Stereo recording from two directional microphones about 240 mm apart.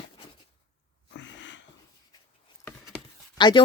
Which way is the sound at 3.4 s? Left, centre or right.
Centre.